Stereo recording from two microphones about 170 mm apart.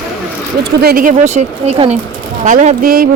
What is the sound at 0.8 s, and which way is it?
Speech, 60° right (ahead or behind).